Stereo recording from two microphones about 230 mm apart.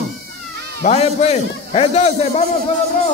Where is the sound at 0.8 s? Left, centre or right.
Left.